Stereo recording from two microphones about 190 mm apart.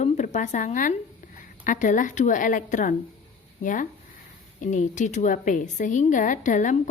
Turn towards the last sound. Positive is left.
turn(degrees=40)  # may be behind; listen again after turning